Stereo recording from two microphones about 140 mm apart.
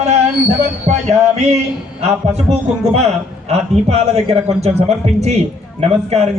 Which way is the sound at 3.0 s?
50° right (ahead or behind).